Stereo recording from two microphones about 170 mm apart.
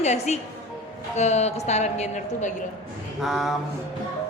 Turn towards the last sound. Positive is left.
turn(degrees=0)  # may be behind; listen again after turning